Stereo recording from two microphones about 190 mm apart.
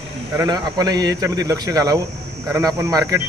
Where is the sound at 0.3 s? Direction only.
20° right (ahead or behind).